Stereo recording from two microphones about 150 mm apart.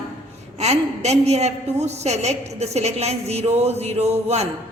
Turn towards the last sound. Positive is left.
turn(degrees=-45)  # may be behind; listen again after turning